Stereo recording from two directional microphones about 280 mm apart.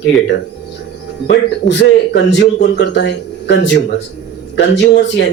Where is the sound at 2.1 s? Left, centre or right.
Left.